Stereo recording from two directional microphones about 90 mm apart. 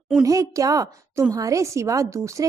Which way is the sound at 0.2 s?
35° right (ahead or behind).